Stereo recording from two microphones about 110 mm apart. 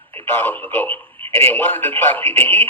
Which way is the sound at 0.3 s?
20° left (ahead or behind).